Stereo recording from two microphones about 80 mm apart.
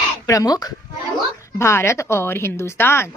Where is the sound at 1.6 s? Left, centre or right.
Left.